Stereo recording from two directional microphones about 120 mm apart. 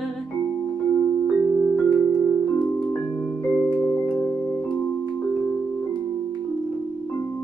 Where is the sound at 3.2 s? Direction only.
Centre (ahead or behind).